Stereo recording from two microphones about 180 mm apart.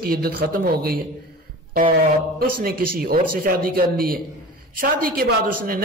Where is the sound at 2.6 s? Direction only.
55° right (ahead or behind).